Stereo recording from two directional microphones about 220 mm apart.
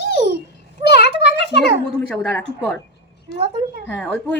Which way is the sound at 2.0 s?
Centre (ahead or behind).